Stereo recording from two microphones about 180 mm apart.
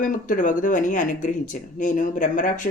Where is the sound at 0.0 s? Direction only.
50° left (ahead or behind).